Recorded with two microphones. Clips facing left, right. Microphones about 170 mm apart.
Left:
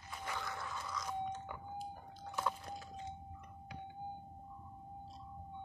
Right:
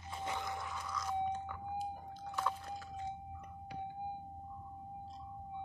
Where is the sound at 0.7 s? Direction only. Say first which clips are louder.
Right 1 dB; 5° left (ahead or behind).